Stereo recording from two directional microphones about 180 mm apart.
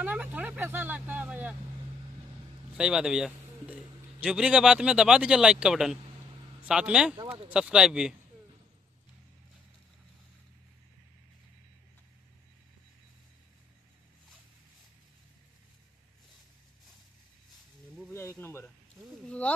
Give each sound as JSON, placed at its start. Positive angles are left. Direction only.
{"t": 0.0, "sound": "speech", "side_deg": -10}
{"t": 2.8, "sound": "a man's voice", "side_deg": -5}
{"t": 7.2, "sound": "speech", "side_deg": -30}
{"t": 7.5, "sound": "a man's voice", "side_deg": -5}
{"t": 18.1, "sound": "speech", "side_deg": 15}
{"t": 19.2, "sound": "a sound", "side_deg": 5}